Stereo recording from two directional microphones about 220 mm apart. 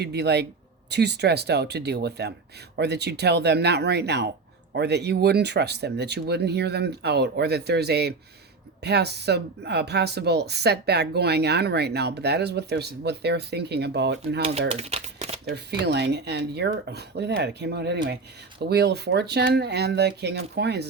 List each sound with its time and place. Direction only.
0.0 s speech: 50° right (ahead or behind)
14.7 s a sound: 30° right (ahead or behind)
15.4 s speech: 50° right (ahead or behind)